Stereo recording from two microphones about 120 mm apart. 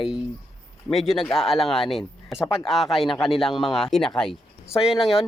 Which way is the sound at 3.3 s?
50° left (ahead or behind).